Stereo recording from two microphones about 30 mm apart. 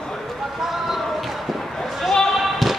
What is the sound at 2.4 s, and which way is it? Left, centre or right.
Basketball bounce, centre.